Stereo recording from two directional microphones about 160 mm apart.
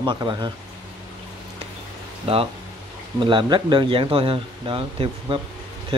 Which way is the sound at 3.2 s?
30° right (ahead or behind).